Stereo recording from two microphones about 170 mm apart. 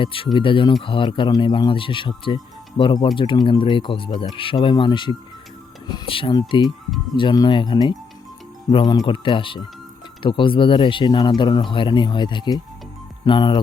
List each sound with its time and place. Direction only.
0.0 s speech: 30° left (ahead or behind)